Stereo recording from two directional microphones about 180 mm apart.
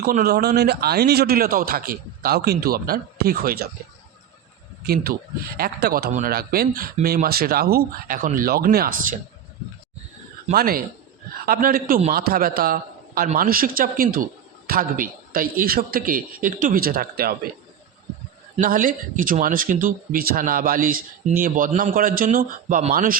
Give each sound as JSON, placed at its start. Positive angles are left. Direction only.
{"t": 0.0, "sound": "speech", "side_deg": -60}
{"t": 5.5, "sound": "speech", "side_deg": -55}
{"t": 10.5, "sound": "speech", "side_deg": -55}
{"t": 18.5, "sound": "speech", "side_deg": -50}